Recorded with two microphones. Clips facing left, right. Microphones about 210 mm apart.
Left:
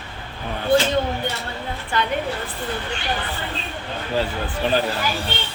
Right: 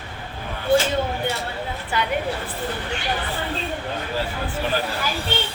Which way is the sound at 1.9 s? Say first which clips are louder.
Left 2 dB; 10° right (ahead or behind).